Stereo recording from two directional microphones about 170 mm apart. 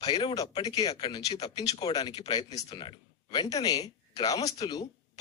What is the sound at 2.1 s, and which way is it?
Speech, 35° left (ahead or behind).